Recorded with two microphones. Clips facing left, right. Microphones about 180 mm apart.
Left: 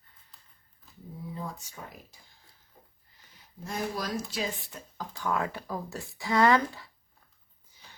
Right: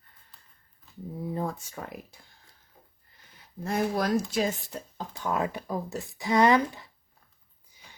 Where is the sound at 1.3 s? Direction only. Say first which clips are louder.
Right 8 dB; 60° right (ahead or behind).